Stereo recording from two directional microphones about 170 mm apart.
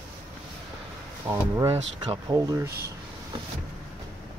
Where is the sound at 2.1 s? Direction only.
25° right (ahead or behind).